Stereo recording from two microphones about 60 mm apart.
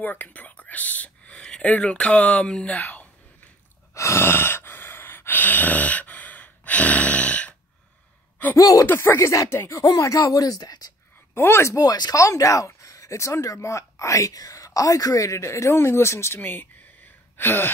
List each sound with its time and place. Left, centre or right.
0.0 s speech: left
3.9 s a sound: left
8.5 s speech: left
8.8 s speech: left
9.8 s speech: left
11.3 s speech: left
11.7 s speech: left
16.3 s speech: left
17.4 s gasp: left